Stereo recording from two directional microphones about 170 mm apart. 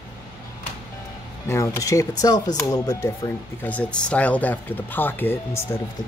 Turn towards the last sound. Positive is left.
turn(degrees=10)  # may be behind; listen again after turning